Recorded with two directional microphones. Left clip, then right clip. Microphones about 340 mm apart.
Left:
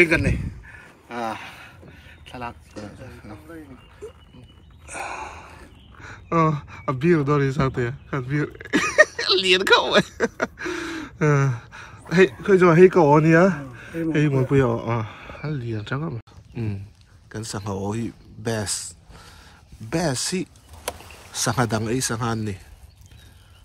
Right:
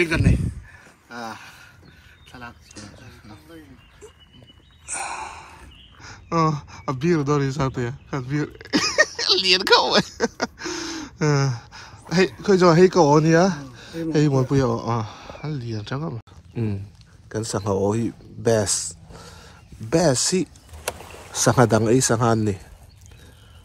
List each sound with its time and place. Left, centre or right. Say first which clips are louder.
1.0 s a sound: left 5 dB; centre
2.8 s speech: left 5 dB; centre
4.0 s dog: left 7 dB; centre
4.8 s speech: right 1 dB; centre
16.5 s speech: right 4 dB; centre